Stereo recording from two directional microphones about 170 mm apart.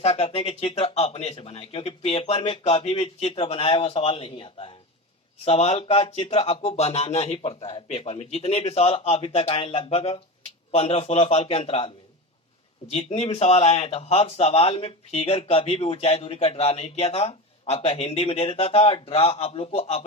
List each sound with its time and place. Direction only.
0.0 s speech: 35° left (ahead or behind)
12.9 s speech: 40° left (ahead or behind)